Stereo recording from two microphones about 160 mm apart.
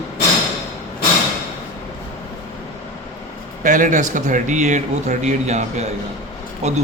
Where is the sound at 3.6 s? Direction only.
55° right (ahead or behind).